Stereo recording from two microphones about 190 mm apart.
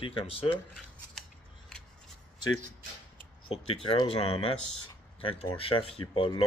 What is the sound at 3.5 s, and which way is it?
Speech, 30° left (ahead or behind).